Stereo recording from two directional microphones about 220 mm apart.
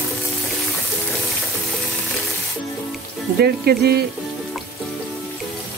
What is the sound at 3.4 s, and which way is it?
Speech, 45° right (ahead or behind).